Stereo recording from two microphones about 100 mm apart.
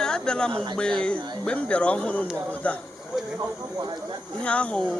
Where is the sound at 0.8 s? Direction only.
10° left (ahead or behind).